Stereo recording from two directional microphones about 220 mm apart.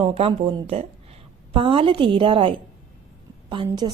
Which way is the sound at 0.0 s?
25° right (ahead or behind).